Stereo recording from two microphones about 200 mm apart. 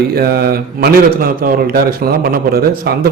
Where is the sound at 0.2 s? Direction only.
50° right (ahead or behind).